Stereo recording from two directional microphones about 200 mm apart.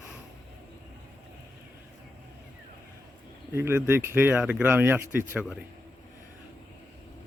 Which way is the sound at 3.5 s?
10° right (ahead or behind).